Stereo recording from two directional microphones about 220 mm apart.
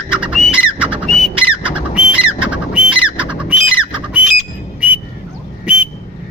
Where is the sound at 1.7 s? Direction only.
5° right (ahead or behind).